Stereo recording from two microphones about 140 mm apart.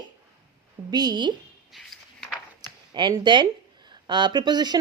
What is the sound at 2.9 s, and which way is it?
Speech, 35° right (ahead or behind).